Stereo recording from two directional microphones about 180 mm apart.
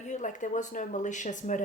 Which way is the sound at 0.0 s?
40° left (ahead or behind).